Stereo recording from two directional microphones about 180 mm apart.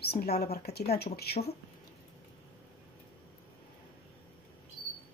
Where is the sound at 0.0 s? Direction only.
60° left (ahead or behind).